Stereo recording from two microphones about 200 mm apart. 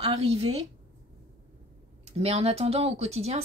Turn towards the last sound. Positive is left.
turn(degrees=-30)  # may be behind; listen again after turning